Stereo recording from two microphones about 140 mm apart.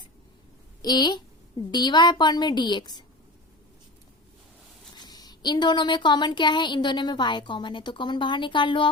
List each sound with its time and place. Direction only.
0.8 s speech: 30° left (ahead or behind)
4.9 s speech: 30° left (ahead or behind)